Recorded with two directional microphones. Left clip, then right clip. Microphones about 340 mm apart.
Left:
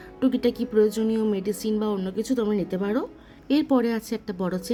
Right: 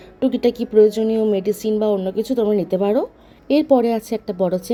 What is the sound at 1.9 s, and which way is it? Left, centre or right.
Speech, centre.